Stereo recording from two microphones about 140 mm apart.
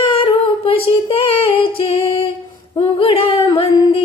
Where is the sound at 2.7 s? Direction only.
35° left (ahead or behind).